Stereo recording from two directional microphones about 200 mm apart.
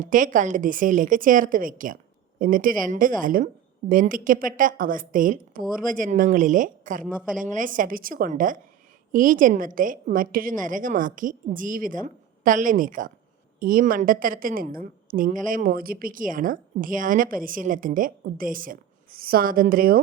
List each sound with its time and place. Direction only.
0.0 s a woman's voice: 40° right (ahead or behind)